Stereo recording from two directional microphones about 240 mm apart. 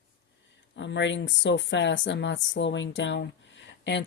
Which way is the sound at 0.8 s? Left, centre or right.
Left.